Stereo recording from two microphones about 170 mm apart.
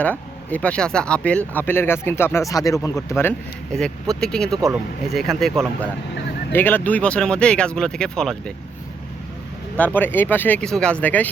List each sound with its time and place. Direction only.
0.0 s speech: 10° left (ahead or behind)
3.8 s speech: centre (ahead or behind)
6.5 s speech: 10° left (ahead or behind)
9.7 s speech: 10° left (ahead or behind)